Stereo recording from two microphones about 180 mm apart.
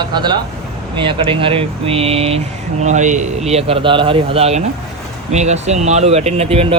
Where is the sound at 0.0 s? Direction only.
25° right (ahead or behind).